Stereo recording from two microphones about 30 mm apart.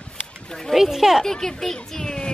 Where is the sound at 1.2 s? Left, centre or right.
Centre.